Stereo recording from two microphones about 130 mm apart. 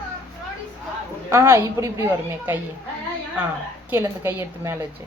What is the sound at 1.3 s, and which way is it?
A woman's voice, 20° right (ahead or behind).